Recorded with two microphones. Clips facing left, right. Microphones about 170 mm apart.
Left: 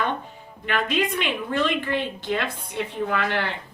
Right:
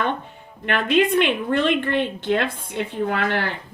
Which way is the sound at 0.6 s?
55° right (ahead or behind).